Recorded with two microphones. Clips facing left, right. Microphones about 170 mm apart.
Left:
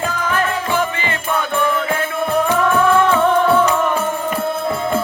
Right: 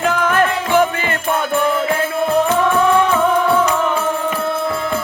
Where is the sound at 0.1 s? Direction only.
60° right (ahead or behind).